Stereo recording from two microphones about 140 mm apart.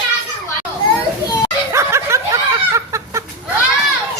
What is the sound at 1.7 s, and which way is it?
Snicker, 20° right (ahead or behind).